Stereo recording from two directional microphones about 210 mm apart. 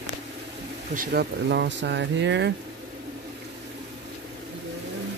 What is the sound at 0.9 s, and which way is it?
Speech, 50° right (ahead or behind).